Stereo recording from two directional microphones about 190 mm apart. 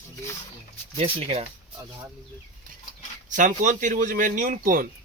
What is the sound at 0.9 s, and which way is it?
Speech, 30° right (ahead or behind).